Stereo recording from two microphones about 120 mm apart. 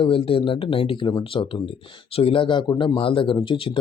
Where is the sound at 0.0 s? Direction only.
50° left (ahead or behind).